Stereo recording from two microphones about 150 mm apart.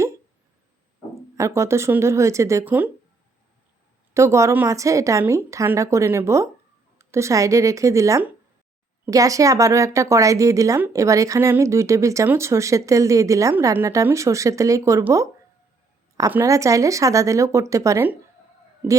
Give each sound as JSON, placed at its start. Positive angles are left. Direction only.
{"t": 1.4, "sound": "speech", "side_deg": -20}
{"t": 4.1, "sound": "speech", "side_deg": -20}
{"t": 16.3, "sound": "speech", "side_deg": -20}